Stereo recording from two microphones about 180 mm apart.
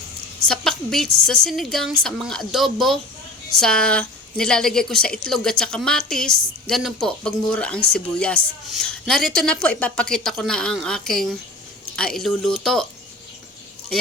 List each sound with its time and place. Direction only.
0.4 s a woman's voice: 5° left (ahead or behind)